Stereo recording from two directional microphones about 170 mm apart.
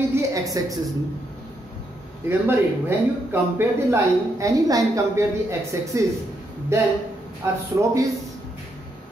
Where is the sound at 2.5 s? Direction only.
15° right (ahead or behind).